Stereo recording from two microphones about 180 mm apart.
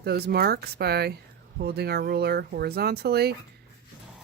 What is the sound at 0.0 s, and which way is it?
Speech, 60° right (ahead or behind).